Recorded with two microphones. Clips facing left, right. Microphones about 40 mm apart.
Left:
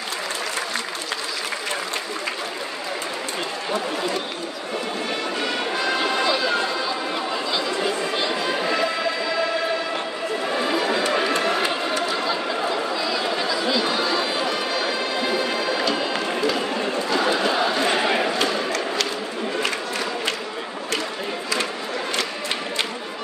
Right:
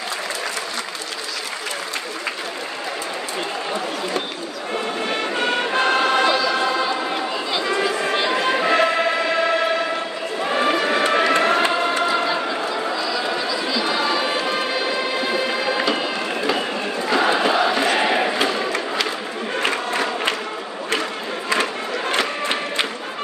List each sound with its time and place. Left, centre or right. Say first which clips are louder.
5.4 s music: right 6 dB; right
7.6 s chatter: right 3 dB; right
8.4 s music: right 5 dB; right
10.5 s run: right 4 dB; right
13.9 s music: right 2 dB; centre
15.6 s run: right 2 dB; centre
17.1 s chant: right 4 dB; right
17.9 s a sound: right 2 dB; right
19.6 s crowd: right 4 dB; right